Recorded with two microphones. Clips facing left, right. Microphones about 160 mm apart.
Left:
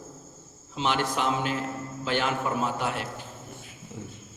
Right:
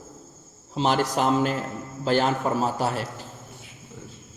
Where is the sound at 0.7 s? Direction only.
40° right (ahead or behind).